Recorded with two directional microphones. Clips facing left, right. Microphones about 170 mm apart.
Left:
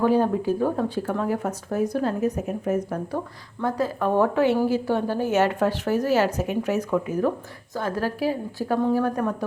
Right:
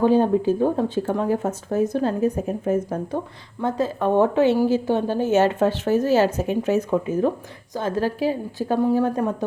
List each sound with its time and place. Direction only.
0.0 s a woman's voice: 25° right (ahead or behind)